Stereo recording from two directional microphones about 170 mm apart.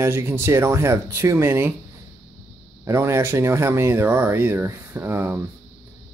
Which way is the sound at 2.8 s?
15° right (ahead or behind).